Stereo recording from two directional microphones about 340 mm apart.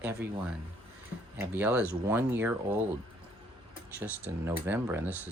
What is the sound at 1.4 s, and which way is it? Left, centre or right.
Speech, centre.